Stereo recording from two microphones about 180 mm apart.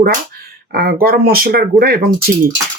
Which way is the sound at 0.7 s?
55° right (ahead or behind).